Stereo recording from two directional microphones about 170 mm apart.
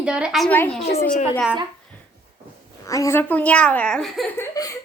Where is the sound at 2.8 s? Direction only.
20° left (ahead or behind); by 4.3 s 5° left (ahead or behind).